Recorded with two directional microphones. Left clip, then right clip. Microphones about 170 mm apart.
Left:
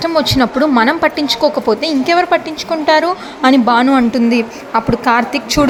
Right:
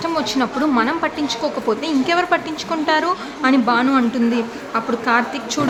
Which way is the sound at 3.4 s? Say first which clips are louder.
Left 6 dB; 35° left (ahead or behind).